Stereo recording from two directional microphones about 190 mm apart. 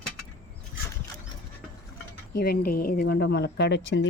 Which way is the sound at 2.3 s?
55° left (ahead or behind).